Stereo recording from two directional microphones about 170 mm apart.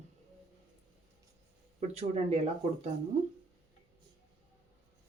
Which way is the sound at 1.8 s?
40° right (ahead or behind).